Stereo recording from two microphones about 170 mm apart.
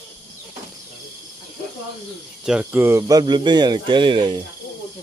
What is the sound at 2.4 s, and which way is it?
Speech, 10° right (ahead or behind).